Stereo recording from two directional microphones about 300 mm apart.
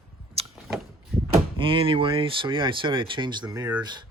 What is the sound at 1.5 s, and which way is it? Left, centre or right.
Speech, centre.